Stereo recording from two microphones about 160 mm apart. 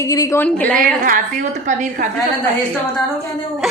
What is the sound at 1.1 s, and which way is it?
A woman's voice, 50° right (ahead or behind).